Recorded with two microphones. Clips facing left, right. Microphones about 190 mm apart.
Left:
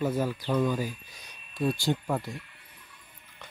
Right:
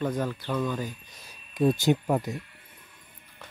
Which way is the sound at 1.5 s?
20° right (ahead or behind).